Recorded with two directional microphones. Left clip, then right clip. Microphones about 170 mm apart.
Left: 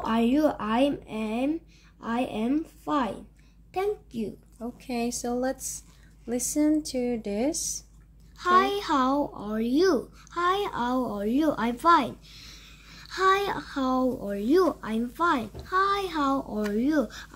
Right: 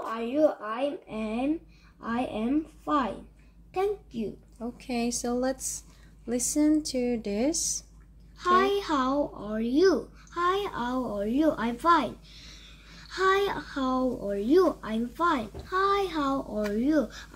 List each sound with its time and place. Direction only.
0.1 s a child's voice: 60° left (ahead or behind)
4.6 s a woman's voice: centre (ahead or behind)
8.4 s a child's voice: 55° left (ahead or behind)